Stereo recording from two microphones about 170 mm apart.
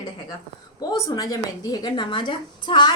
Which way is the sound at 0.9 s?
20° left (ahead or behind).